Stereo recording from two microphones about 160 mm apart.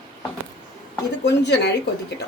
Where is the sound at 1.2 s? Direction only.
90° left.